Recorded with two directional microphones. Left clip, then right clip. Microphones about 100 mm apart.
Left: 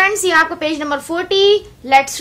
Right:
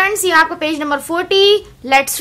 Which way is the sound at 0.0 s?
5° right (ahead or behind).